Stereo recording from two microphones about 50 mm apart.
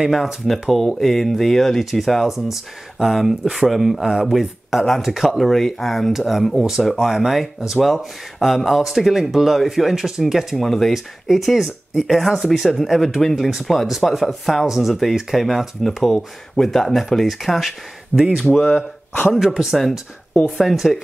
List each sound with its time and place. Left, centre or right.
0.1 s speech: centre
18.5 s speech: left
19.4 s speech: centre